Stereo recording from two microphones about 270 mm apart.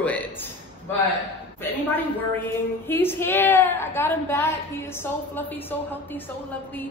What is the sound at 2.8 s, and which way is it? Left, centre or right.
A woman's voice, centre.